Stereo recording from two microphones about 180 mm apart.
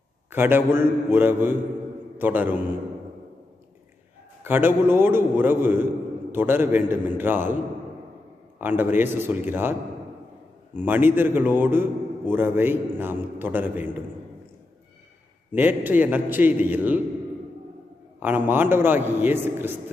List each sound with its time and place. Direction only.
0.3 s a man's voice: 10° right (ahead or behind)
4.4 s a man's voice: 10° right (ahead or behind)
8.6 s a man's voice: 10° right (ahead or behind)
10.8 s a man's voice: 10° right (ahead or behind)
15.5 s a man's voice: 10° right (ahead or behind)
18.2 s a man's voice: 10° right (ahead or behind)